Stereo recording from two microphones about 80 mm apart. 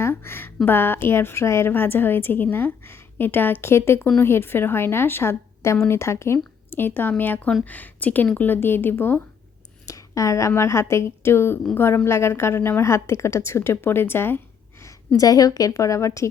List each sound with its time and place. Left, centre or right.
0.0 s a woman's voice: left
9.8 s a woman's voice: left
15.1 s a woman's voice: left